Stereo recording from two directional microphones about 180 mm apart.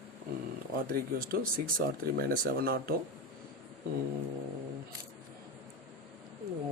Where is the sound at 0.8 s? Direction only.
55° right (ahead or behind).